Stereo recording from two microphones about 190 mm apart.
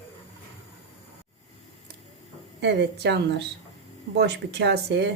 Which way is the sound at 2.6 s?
65° right (ahead or behind).